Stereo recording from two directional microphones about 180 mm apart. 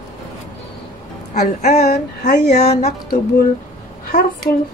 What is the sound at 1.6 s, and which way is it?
Speech, 40° left (ahead or behind).